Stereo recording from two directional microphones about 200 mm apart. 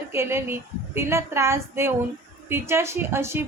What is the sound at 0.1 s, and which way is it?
A woman's voice, 10° right (ahead or behind).